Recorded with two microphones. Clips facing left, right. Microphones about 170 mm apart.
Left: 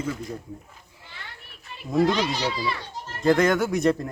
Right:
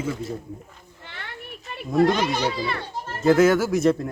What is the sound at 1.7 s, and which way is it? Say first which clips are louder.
A child's voice: right 2 dB; 60° right (ahead or behind).